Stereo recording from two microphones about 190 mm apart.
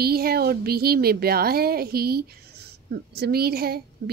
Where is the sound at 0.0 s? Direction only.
55° right (ahead or behind).